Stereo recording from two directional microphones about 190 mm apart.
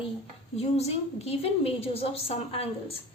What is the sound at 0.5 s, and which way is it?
A woman's voice, 35° left (ahead or behind).